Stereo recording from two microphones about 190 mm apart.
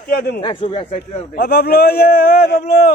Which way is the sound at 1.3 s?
60° left (ahead or behind).